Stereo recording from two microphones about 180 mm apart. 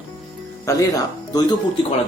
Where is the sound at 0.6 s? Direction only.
20° left (ahead or behind).